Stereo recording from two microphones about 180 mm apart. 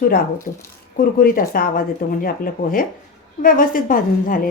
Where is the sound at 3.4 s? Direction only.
50° left (ahead or behind).